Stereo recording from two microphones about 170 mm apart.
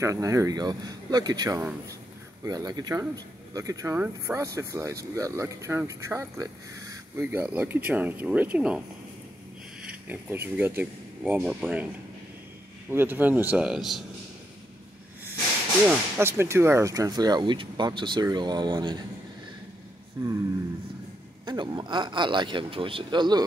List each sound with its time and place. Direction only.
0.0 s speech: 20° right (ahead or behind)
12.9 s speech: 10° right (ahead or behind)
16.2 s speech: 15° right (ahead or behind)
20.2 s speech: 25° right (ahead or behind)
21.5 s speech: 25° right (ahead or behind)